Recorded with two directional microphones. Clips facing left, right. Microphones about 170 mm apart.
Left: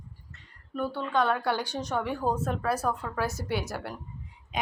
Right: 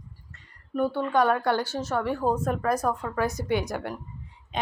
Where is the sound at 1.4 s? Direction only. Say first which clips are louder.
Right 4 dB; 10° left (ahead or behind).